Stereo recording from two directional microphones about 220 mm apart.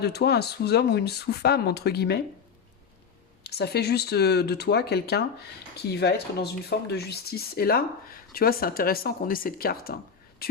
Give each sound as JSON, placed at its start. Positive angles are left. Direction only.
{"t": 0.0, "sound": "speech", "side_deg": 45}
{"t": 3.4, "sound": "speech", "side_deg": 45}